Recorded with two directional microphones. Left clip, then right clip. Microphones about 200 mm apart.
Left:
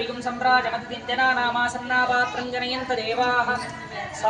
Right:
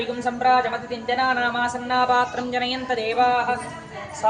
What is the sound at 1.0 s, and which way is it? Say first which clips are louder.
Speech: even; 45° right (ahead or behind).